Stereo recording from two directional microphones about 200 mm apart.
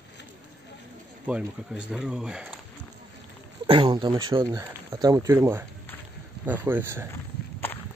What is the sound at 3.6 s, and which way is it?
Speech, 25° right (ahead or behind).